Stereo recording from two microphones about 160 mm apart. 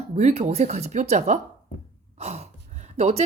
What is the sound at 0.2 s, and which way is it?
Speech, 45° right (ahead or behind).